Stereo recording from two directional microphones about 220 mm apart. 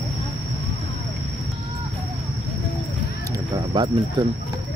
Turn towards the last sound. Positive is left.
turn(degrees=-20)  # may be behind; listen again after turning